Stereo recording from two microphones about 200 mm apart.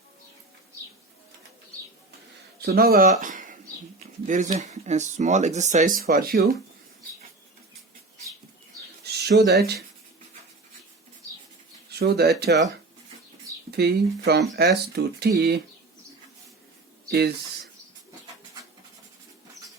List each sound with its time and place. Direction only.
2.6 s speech: 50° right (ahead or behind)
9.1 s speech: 55° right (ahead or behind)
11.9 s speech: 55° right (ahead or behind)
13.7 s speech: 55° right (ahead or behind)
17.1 s speech: 55° right (ahead or behind)